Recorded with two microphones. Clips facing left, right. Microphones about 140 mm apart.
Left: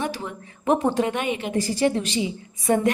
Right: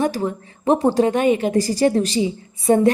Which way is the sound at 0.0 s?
40° right (ahead or behind).